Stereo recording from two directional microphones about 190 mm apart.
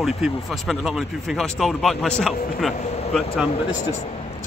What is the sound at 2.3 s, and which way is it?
Speech, 50° left (ahead or behind).